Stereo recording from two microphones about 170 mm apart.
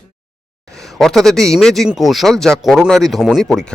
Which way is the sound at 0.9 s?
Centre (ahead or behind).